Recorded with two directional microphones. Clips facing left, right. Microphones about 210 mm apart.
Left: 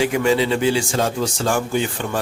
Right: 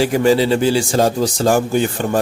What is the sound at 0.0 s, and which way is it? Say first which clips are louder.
A man's voice: right 4 dB; 35° right (ahead or behind).